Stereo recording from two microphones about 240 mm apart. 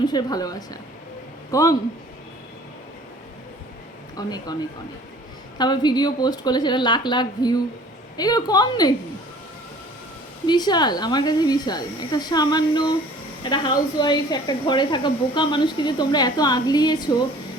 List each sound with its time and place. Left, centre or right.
0.0 s a man's voice: centre
4.2 s speech: centre
5.5 s speech: centre
10.4 s speech: centre